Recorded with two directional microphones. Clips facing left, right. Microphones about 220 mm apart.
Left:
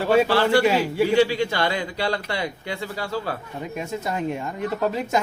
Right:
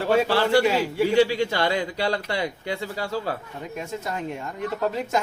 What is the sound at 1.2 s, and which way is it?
Speech, 35° right (ahead or behind).